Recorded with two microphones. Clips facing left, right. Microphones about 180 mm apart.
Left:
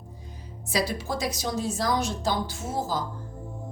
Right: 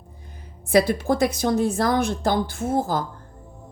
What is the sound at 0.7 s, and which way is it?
A woman's voice, 55° right (ahead or behind).